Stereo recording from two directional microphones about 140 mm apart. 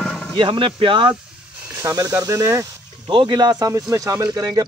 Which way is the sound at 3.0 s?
35° right (ahead or behind).